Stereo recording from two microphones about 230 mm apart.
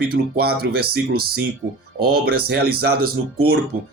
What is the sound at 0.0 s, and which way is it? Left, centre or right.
Speech, right.